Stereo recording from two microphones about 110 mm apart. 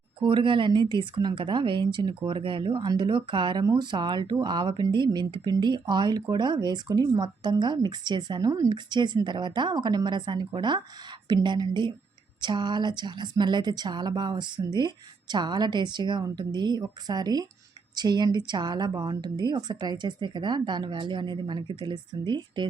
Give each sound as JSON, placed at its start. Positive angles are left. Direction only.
{"t": 0.2, "sound": "a woman's voice", "side_deg": -50}